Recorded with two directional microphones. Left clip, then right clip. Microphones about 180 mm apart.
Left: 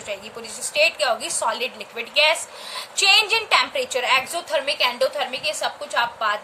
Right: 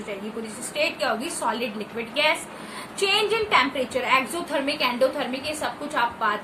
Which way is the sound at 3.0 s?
60° left (ahead or behind).